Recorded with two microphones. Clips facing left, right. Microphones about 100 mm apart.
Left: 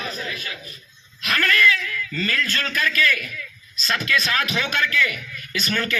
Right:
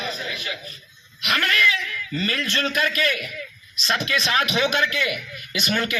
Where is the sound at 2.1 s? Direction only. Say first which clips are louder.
Even; 25° right (ahead or behind).